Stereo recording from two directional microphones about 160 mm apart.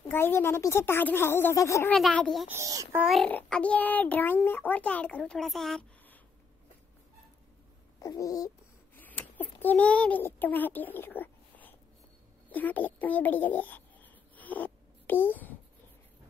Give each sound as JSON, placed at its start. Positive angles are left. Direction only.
{"t": 0.1, "sound": "a child's voice", "side_deg": 15}
{"t": 1.9, "sound": "speech", "side_deg": 5}
{"t": 2.4, "sound": "a child's voice", "side_deg": -15}
{"t": 3.0, "sound": "a child's voice", "side_deg": 0}
{"t": 8.0, "sound": "a child's voice", "side_deg": 20}
{"t": 12.4, "sound": "a sound", "side_deg": 10}